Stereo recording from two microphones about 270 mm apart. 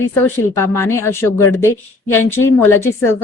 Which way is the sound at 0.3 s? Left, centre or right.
Centre.